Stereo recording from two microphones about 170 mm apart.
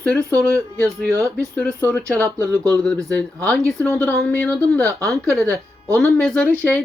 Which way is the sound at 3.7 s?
15° left (ahead or behind).